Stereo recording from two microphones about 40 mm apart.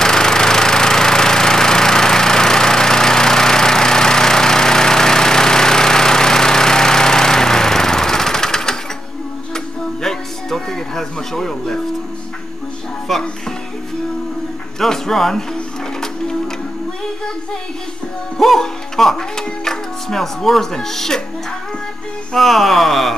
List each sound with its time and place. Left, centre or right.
0.0 s engine: centre
10.0 s music: centre
13.1 s speech: centre
14.8 s speech: centre
15.5 s printer: centre
18.4 s speech: centre
22.3 s speech: centre